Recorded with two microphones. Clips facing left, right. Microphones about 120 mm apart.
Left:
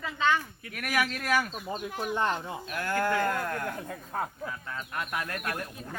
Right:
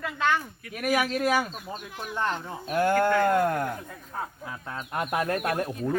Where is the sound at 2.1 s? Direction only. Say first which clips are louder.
Even; 20° left (ahead or behind).